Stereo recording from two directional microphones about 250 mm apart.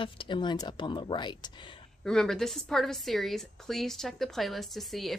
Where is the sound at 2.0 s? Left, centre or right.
Centre.